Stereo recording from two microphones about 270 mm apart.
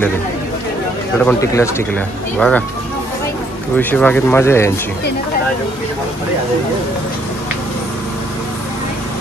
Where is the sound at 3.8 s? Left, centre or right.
Centre.